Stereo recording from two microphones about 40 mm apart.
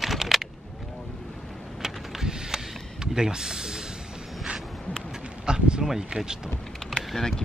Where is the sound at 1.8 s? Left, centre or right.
Centre.